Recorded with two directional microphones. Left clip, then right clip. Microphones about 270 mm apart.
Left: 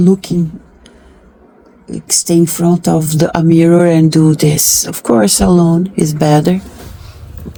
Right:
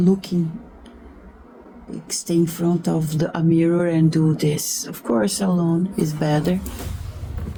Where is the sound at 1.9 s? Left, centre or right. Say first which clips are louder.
Left 10 dB; left.